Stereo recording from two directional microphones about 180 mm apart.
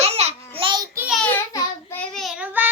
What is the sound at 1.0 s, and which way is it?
Child singing, centre (ahead or behind).